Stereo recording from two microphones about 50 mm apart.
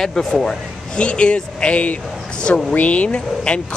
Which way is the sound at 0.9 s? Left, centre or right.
Left.